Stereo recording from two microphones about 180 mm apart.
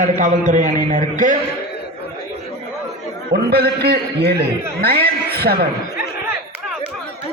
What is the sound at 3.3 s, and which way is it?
A man's voice, 65° right (ahead or behind).